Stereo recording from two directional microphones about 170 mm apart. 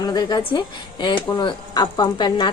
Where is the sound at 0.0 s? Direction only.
25° left (ahead or behind).